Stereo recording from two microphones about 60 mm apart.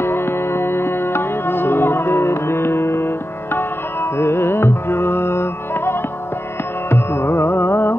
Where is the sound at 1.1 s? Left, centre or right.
Left.